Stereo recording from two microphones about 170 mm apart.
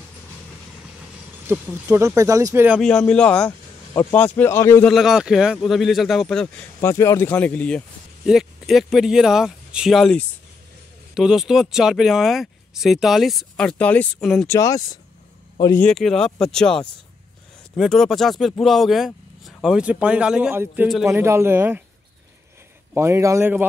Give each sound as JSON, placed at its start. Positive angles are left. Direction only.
{"t": 1.5, "sound": "speech", "side_deg": -15}
{"t": 2.8, "sound": "speech", "side_deg": 5}
{"t": 4.8, "sound": "speech", "side_deg": 0}
{"t": 14.5, "sound": "speech", "side_deg": 20}
{"t": 15.8, "sound": "speech", "side_deg": 5}
{"t": 22.9, "sound": "speech", "side_deg": -15}